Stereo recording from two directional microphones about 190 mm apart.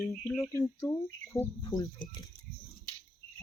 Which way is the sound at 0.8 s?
20° left (ahead or behind).